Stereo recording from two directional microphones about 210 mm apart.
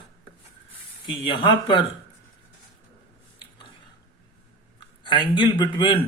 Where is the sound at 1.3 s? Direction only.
25° left (ahead or behind).